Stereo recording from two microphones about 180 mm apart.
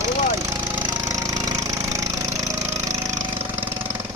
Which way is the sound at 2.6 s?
40° right (ahead or behind).